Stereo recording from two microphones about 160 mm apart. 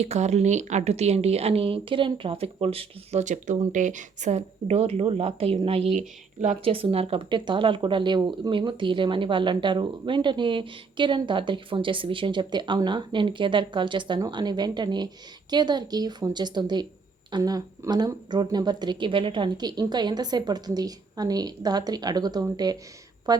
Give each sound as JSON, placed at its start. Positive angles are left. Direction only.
{"t": 0.0, "sound": "speech", "side_deg": -45}
{"t": 6.0, "sound": "speech", "side_deg": -50}
{"t": 6.7, "sound": "speech", "side_deg": -35}